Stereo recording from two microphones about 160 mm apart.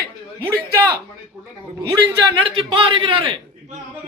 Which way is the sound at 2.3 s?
35° right (ahead or behind).